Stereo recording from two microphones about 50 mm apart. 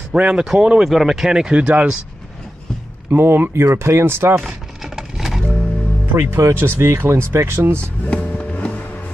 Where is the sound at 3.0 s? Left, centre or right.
Right.